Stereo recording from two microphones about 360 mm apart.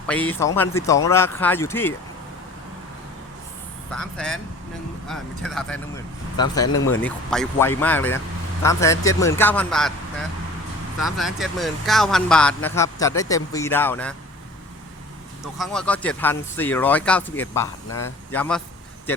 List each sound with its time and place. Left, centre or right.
0.1 s speech: centre
3.9 s speech: centre
6.3 s speech: centre
6.7 s speech: left
7.0 s speech: centre
11.0 s speech: centre
15.5 s speech: centre